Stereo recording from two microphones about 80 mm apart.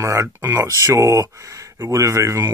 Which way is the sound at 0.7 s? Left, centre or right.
Right.